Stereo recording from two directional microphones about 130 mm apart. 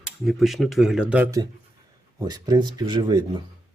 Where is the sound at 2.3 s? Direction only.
30° right (ahead or behind).